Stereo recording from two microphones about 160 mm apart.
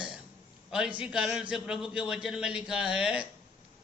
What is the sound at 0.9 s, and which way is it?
Speech, 5° right (ahead or behind).